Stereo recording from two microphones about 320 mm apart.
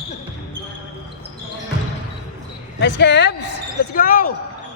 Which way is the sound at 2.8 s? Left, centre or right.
Left.